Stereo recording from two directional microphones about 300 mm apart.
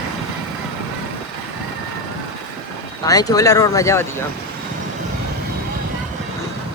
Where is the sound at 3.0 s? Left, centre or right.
Centre.